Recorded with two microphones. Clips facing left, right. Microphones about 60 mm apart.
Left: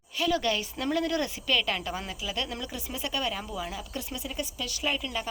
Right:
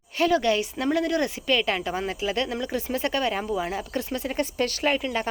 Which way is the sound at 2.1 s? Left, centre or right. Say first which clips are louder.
Right 7 dB; right.